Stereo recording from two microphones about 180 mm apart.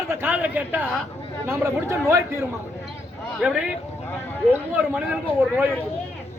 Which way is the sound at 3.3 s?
5° right (ahead or behind).